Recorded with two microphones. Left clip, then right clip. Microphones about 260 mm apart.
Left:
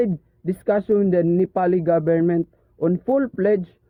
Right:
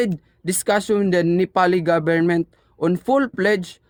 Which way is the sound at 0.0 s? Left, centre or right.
Centre.